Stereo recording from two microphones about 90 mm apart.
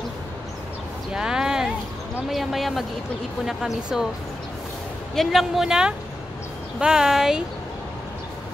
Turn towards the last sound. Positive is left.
turn(degrees=-5)  # may be behind; listen again after turning